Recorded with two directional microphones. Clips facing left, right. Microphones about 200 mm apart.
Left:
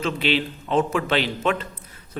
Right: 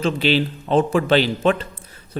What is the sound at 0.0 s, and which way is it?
A man's voice, 35° right (ahead or behind).